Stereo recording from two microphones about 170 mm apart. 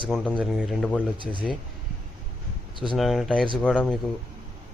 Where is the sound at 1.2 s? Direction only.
30° right (ahead or behind).